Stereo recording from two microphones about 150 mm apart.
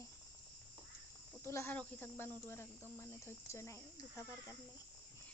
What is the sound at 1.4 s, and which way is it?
Speech, 15° left (ahead or behind).